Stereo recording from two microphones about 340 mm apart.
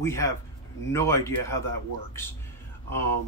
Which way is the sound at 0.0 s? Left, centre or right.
Centre.